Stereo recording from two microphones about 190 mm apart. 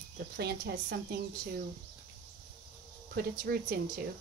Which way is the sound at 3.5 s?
55° right (ahead or behind).